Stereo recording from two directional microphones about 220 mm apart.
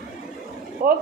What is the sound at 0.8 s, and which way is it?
Speech, 40° right (ahead or behind).